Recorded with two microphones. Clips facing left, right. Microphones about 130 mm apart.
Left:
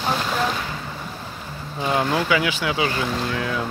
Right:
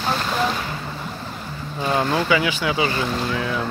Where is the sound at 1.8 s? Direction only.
5° left (ahead or behind).